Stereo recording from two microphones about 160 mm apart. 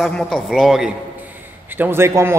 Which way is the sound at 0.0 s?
Centre (ahead or behind).